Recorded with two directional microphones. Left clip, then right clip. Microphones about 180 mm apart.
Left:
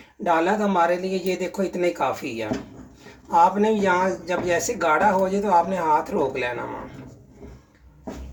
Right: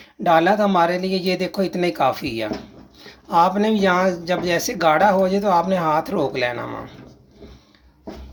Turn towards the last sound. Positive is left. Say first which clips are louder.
# right 3 dB
turn(degrees=-60)  # may be behind; listen again after turning